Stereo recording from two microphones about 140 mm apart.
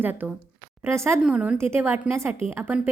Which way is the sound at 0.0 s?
15° right (ahead or behind).